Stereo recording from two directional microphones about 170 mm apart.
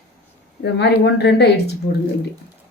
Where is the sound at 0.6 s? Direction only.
85° left.